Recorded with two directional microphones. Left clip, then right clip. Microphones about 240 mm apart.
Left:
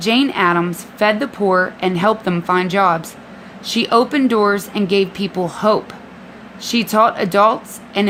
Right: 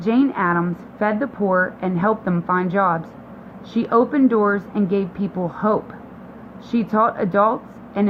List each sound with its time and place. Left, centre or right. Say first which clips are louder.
0.0 s speech: left 4 dB; left